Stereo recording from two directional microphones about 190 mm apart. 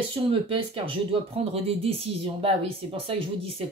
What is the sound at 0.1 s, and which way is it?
Speech, 30° right (ahead or behind).